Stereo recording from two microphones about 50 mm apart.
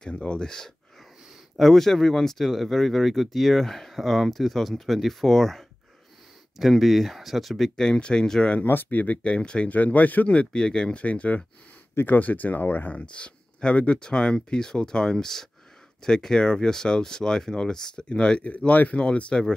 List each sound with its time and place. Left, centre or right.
0.1 s speech: left
8.6 s speech: left
9.0 s speech: left
9.7 s speech: left
12.9 s speech: left
18.7 s speech: left